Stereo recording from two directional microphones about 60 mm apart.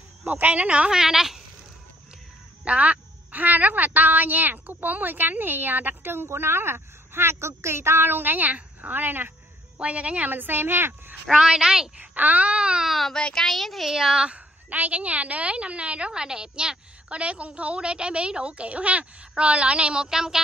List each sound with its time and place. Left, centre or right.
0.3 s a woman's voice: right
0.8 s a woman's voice: centre
2.6 s a woman's voice: right
9.8 s a woman's voice: right
11.2 s a woman's voice: centre
12.0 s a woman's voice: right
12.9 s a woman's voice: centre
14.7 s a woman's voice: right